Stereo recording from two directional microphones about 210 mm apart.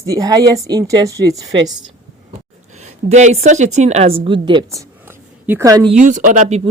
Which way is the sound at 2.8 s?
35° right (ahead or behind).